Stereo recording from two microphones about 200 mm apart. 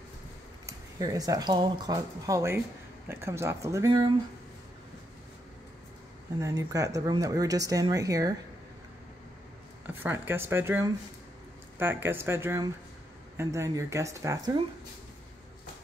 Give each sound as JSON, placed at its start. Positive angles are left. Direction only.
{"t": 0.7, "sound": "speech", "side_deg": -20}
{"t": 6.4, "sound": "speech", "side_deg": -15}
{"t": 9.8, "sound": "speech", "side_deg": -10}